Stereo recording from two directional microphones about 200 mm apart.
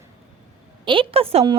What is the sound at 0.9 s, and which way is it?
Speech, 25° right (ahead or behind).